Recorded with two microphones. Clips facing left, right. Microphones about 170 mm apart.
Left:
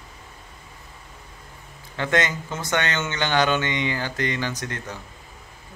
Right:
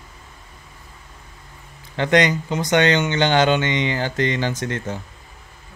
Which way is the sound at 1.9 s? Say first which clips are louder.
Right 6 dB; 20° right (ahead or behind).